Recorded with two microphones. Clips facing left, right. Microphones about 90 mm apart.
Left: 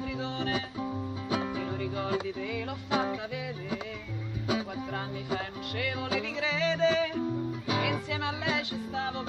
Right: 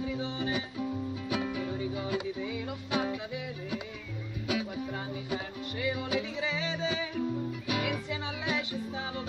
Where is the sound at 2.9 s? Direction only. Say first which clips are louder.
Left 2 dB; 30° left (ahead or behind).